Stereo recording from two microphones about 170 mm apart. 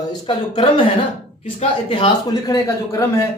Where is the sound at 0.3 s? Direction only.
30° left (ahead or behind).